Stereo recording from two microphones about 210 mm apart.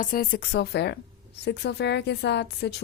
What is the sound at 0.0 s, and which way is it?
A woman's voice, 40° left (ahead or behind).